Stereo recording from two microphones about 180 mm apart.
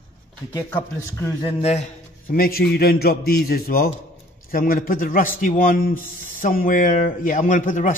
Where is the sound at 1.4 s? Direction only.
35° left (ahead or behind).